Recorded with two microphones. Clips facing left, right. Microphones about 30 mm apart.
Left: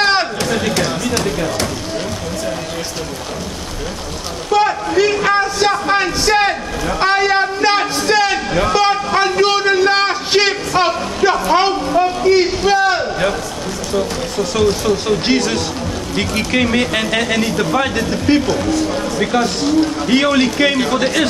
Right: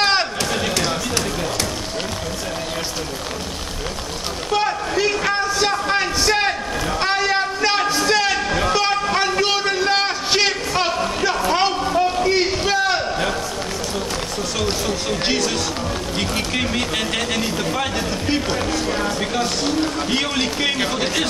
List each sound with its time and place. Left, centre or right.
0.0 s a sound: centre
4.6 s a sound: centre
14.9 s speech: centre
15.3 s speech: left
18.5 s speech: centre
19.1 s speech: centre